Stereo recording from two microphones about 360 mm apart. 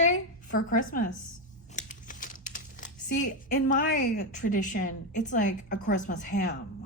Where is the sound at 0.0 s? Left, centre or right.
Left.